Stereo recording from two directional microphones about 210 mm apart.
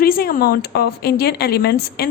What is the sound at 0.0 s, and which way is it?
Speech, 45° left (ahead or behind).